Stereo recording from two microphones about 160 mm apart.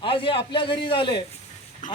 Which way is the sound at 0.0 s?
35° left (ahead or behind).